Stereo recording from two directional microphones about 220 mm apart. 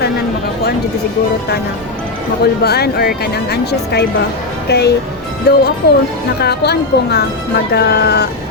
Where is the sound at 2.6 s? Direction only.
45° left (ahead or behind).